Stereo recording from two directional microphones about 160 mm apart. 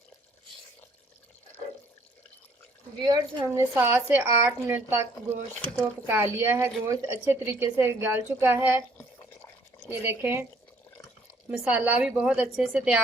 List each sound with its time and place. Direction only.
3.0 s a woman's voice: 25° right (ahead or behind)
10.0 s a woman's voice: 15° right (ahead or behind)
11.5 s a woman's voice: 5° right (ahead or behind)